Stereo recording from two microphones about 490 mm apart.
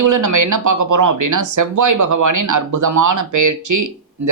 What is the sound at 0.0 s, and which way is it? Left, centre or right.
Speech, right.